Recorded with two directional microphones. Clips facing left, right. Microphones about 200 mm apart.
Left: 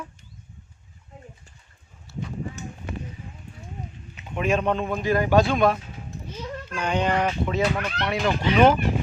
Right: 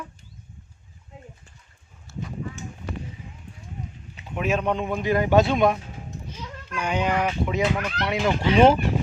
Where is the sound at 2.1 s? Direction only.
50° right (ahead or behind).